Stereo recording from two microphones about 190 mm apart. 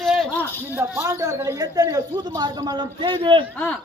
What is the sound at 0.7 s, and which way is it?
A woman's voice, 15° right (ahead or behind).